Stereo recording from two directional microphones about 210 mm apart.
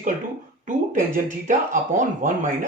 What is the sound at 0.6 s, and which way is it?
Speech, 40° right (ahead or behind).